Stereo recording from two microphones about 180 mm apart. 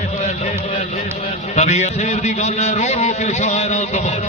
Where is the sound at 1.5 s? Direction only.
40° left (ahead or behind).